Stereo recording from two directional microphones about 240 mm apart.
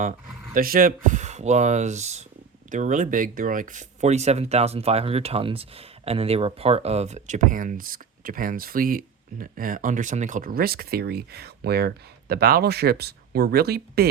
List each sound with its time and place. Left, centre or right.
0.5 s speech: right